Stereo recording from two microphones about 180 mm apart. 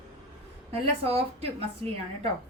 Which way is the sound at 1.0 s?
30° right (ahead or behind).